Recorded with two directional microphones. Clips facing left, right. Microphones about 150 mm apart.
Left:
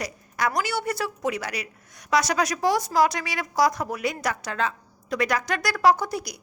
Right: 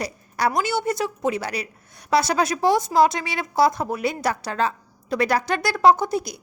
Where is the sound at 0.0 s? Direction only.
30° right (ahead or behind).